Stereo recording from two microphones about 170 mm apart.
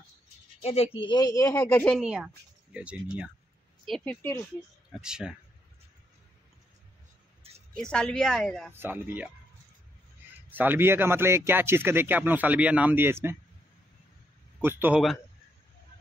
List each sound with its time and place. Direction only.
0.6 s speech: 35° left (ahead or behind); by 2.0 s 10° left (ahead or behind)
2.0 s speech: 5° right (ahead or behind)
3.8 s speech: 5° left (ahead or behind)
5.0 s a woman's voice: 5° right (ahead or behind)
7.7 s a woman's voice: 5° left (ahead or behind)
8.7 s speech: 10° right (ahead or behind)
10.5 s speech: 10° right (ahead or behind)
14.6 s speech: 10° right (ahead or behind)